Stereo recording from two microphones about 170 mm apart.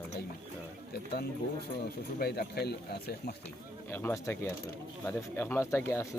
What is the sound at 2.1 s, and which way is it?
Speech, 65° left (ahead or behind).